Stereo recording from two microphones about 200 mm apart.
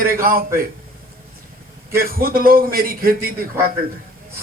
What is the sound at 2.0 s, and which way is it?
A man's voice, 45° right (ahead or behind).